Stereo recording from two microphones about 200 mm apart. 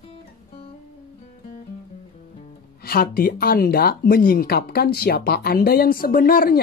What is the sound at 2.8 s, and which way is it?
Speech, 50° left (ahead or behind).